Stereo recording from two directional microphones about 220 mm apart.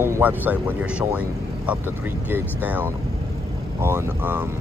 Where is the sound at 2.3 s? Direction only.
10° right (ahead or behind).